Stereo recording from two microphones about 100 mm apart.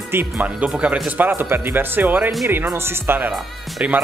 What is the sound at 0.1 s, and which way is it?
Speech, 20° right (ahead or behind).